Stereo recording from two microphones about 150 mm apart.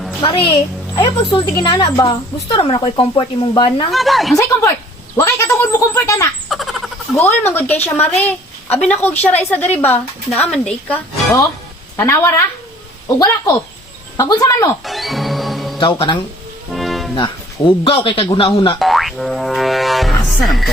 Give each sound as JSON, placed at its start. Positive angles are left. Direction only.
{"t": 0.2, "sound": "a woman's voice", "side_deg": 35}
{"t": 3.9, "sound": "a woman's voice", "side_deg": 0}
{"t": 4.4, "sound": "speech", "side_deg": 20}
{"t": 5.1, "sound": "a sound", "side_deg": 20}
{"t": 6.5, "sound": "a sound", "side_deg": 0}
{"t": 7.2, "sound": "a woman's voice", "side_deg": 15}
{"t": 14.8, "sound": "music", "side_deg": 0}
{"t": 15.8, "sound": "a woman's voice", "side_deg": 30}
{"t": 16.7, "sound": "music", "side_deg": 0}
{"t": 17.8, "sound": "a woman's voice", "side_deg": 35}
{"t": 18.8, "sound": "boing", "side_deg": 0}
{"t": 20.2, "sound": "a woman's voice", "side_deg": 0}